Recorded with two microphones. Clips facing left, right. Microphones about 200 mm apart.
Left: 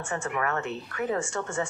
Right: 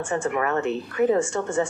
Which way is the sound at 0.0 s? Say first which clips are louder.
Right 6 dB; 30° right (ahead or behind).